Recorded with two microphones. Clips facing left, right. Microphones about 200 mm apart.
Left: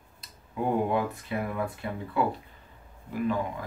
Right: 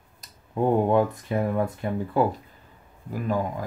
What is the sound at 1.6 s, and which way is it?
Speech, 40° right (ahead or behind).